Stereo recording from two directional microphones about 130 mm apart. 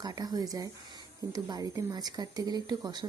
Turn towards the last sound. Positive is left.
turn(degrees=-30)  # may be behind; listen again after turning